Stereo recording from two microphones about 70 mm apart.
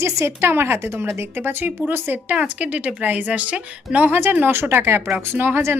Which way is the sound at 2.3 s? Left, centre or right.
Centre.